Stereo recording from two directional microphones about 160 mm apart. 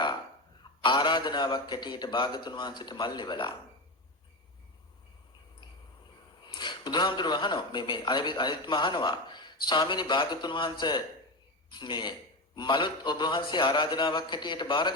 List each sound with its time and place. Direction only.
0.6 s speech: 30° left (ahead or behind)
6.4 s speech: 30° left (ahead or behind)